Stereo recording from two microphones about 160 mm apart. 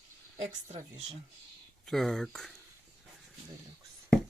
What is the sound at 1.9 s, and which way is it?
Speech, centre (ahead or behind).